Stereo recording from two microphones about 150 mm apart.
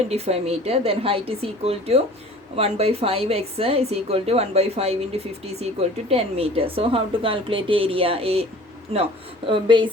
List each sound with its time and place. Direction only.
0.1 s a woman's voice: 45° right (ahead or behind)
9.5 s a woman's voice: 35° right (ahead or behind)